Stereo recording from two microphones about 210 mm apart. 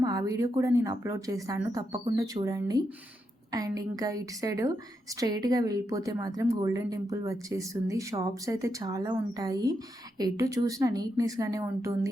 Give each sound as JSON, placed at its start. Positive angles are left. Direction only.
{"t": 0.0, "sound": "speech", "side_deg": -15}